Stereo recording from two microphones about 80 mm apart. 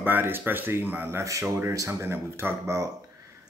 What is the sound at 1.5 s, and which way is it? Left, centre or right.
Speech, right.